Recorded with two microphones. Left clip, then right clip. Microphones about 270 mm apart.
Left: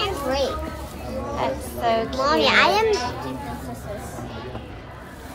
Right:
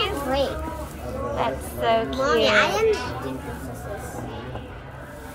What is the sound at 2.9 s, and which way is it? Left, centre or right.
Speech, centre.